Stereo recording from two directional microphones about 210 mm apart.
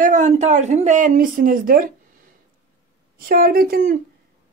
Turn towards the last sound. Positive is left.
turn(degrees=-45)  # may be behind; listen again after turning